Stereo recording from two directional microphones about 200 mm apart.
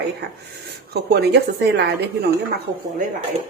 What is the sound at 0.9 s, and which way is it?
Speech, 50° right (ahead or behind).